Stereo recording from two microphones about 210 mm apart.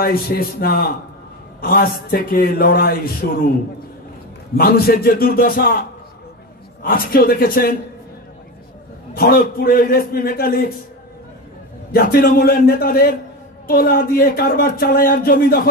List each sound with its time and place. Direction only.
0.0 s speech: 45° left (ahead or behind)
4.6 s speech: 45° left (ahead or behind)
9.1 s speech: 45° left (ahead or behind)
11.9 s speech: 45° left (ahead or behind)